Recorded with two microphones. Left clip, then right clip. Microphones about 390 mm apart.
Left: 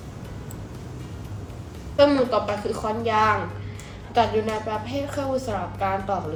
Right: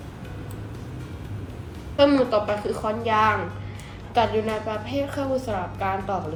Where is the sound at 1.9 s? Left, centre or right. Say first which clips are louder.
Even; centre.